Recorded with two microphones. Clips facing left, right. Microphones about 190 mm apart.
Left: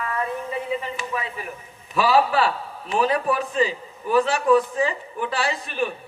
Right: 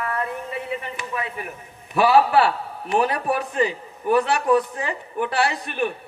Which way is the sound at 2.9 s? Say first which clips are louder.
Even; 60° right (ahead or behind).